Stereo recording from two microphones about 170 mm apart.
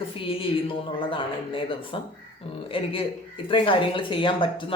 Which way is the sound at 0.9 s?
30° left (ahead or behind).